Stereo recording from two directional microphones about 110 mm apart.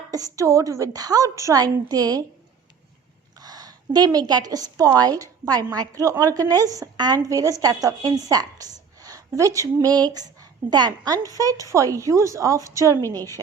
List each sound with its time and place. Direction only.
0.1 s a woman's voice: 30° right (ahead or behind)
3.3 s a woman's voice: 35° right (ahead or behind)